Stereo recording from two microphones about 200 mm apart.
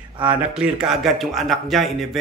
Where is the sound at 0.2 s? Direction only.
5° right (ahead or behind).